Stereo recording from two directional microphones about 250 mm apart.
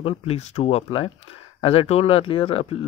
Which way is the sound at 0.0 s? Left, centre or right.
Left.